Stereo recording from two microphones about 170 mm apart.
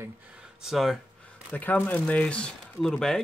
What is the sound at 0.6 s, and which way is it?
Speech, centre (ahead or behind).